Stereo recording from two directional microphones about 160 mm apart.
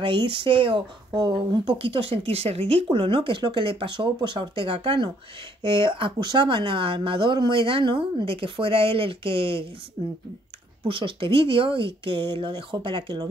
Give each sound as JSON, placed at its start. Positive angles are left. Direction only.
{"t": 0.0, "sound": "speech", "side_deg": -30}